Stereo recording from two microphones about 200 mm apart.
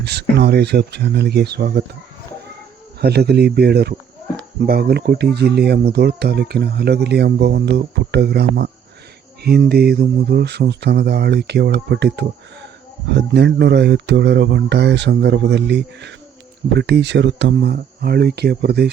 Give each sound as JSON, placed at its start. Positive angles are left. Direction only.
{"t": 0.0, "sound": "speech", "side_deg": -55}
{"t": 3.0, "sound": "speech", "side_deg": -55}